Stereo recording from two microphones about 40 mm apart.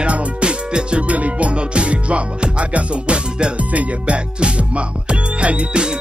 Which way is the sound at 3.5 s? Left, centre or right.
Right.